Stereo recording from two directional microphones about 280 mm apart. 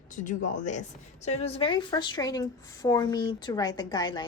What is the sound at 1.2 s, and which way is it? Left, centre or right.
Speech, left.